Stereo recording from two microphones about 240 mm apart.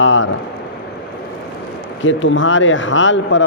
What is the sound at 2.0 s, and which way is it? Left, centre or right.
Speech, left.